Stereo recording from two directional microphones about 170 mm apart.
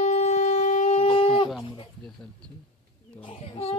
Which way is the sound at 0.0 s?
40° left (ahead or behind).